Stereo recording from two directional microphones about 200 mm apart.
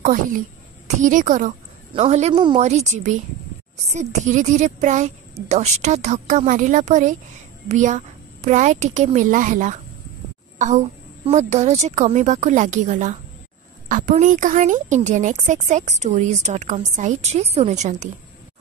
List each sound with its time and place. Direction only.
0.8 s speech: 40° right (ahead or behind)
11.2 s speech: 35° right (ahead or behind)